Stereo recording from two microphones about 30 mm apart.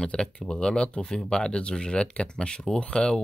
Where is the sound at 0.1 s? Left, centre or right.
Left.